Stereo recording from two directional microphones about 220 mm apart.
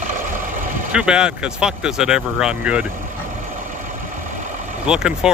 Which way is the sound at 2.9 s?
35° right (ahead or behind).